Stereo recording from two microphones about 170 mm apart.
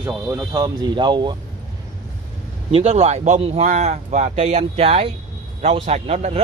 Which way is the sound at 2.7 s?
40° right (ahead or behind).